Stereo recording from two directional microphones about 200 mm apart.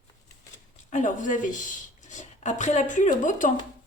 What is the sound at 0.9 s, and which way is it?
A woman's voice, 40° left (ahead or behind).